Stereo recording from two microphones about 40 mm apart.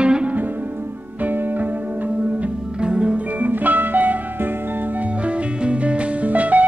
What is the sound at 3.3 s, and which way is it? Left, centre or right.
Music, right.